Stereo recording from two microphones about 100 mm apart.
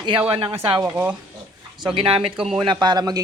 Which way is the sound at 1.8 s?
60° right (ahead or behind).